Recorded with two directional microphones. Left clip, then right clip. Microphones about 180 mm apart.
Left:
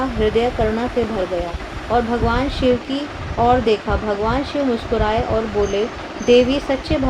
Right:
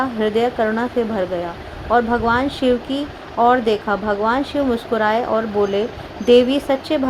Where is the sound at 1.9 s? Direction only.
40° right (ahead or behind).